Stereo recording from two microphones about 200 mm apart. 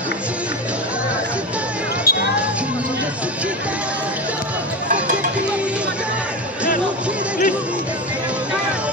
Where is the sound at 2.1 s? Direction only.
45° left (ahead or behind).